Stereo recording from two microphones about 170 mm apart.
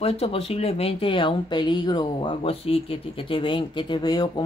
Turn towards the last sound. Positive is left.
turn(degrees=25)  # may be behind; listen again after turning